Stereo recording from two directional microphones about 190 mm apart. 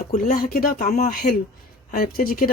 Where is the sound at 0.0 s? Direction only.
45° left (ahead or behind).